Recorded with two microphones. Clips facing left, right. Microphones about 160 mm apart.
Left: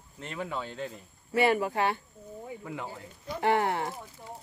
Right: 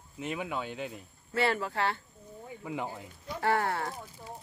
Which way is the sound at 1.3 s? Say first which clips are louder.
Left 4 dB; 15° left (ahead or behind).